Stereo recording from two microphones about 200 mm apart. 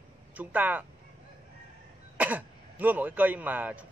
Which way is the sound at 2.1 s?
10° right (ahead or behind).